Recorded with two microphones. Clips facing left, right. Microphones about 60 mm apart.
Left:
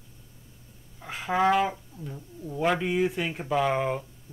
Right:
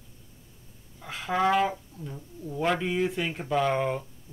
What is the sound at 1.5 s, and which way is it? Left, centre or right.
Speech, centre.